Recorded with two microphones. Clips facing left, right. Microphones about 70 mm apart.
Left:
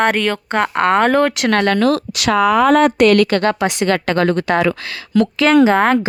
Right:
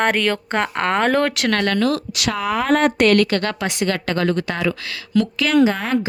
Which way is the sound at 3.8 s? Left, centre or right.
Left.